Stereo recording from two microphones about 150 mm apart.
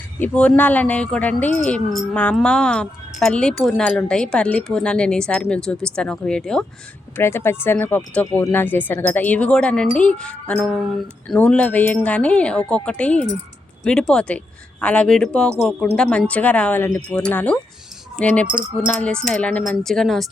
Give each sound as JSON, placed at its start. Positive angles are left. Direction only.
{"t": 0.2, "sound": "speech", "side_deg": 10}
{"t": 7.2, "sound": "a woman's voice", "side_deg": 15}